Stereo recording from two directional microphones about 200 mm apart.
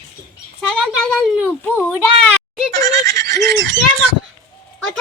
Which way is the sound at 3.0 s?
55° right (ahead or behind).